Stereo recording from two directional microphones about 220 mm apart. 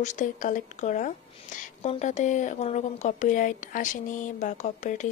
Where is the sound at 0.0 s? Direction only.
35° left (ahead or behind).